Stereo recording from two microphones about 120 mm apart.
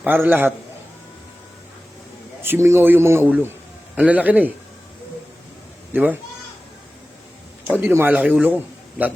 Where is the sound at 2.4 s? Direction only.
20° right (ahead or behind).